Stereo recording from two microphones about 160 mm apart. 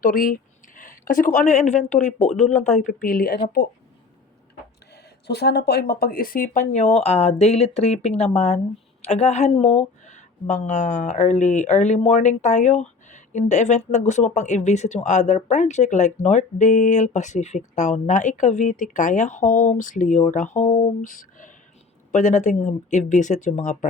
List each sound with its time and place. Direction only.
0.0 s speech: 60° left (ahead or behind)
5.3 s speech: 90° left; by 20.9 s 45° left (ahead or behind)
22.1 s speech: 50° left (ahead or behind)